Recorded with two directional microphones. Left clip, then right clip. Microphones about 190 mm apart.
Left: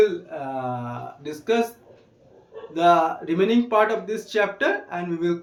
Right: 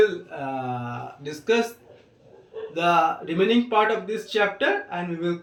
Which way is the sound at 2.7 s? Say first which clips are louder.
Left 2 dB; 20° left (ahead or behind).